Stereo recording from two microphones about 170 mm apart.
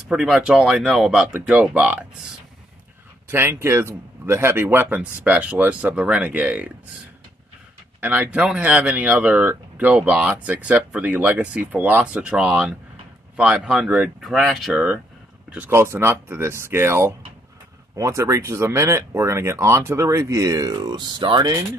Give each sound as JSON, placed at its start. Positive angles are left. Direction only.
{"t": 0.1, "sound": "speech", "side_deg": -5}
{"t": 8.0, "sound": "speech", "side_deg": -10}